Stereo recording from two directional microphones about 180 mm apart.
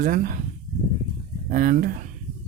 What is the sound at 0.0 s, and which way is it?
Speech, 50° right (ahead or behind).